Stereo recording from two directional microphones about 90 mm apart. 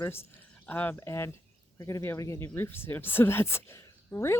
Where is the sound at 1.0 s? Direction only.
30° left (ahead or behind).